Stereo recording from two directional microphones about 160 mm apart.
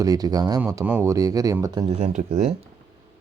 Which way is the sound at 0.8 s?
15° right (ahead or behind).